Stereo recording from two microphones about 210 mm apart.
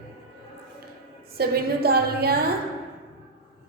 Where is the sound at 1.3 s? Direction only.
45° right (ahead or behind).